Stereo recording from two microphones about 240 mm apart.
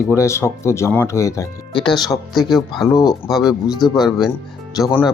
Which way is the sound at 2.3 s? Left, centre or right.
Centre.